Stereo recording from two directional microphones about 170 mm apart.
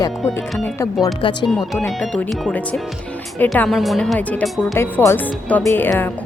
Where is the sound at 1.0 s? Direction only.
25° left (ahead or behind).